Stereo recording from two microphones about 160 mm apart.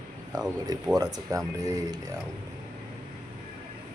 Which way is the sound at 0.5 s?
25° right (ahead or behind).